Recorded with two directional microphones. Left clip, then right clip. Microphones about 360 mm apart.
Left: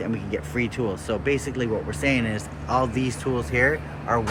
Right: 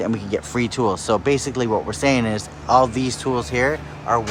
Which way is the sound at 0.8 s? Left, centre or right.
Centre.